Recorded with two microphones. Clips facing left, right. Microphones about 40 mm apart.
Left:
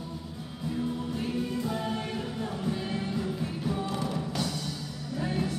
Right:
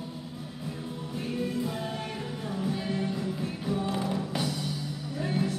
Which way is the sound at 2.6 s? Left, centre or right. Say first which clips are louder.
Right 3 dB; centre.